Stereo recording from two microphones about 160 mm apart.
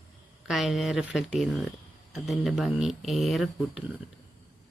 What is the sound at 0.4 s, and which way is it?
Speech, centre (ahead or behind).